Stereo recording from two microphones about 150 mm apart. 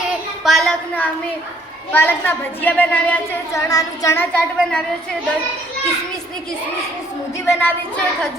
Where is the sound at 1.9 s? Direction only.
15° left (ahead or behind).